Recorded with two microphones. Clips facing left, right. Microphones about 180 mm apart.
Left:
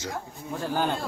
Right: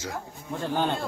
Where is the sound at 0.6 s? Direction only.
5° left (ahead or behind).